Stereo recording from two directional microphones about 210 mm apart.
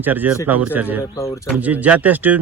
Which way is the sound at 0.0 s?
10° right (ahead or behind).